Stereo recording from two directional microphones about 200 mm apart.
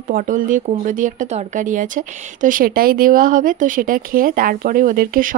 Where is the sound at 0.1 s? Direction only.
40° right (ahead or behind).